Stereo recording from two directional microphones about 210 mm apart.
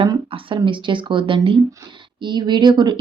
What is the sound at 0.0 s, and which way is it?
Speech, 25° right (ahead or behind).